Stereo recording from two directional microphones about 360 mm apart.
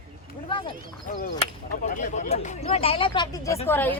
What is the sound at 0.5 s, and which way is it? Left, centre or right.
Speech, centre.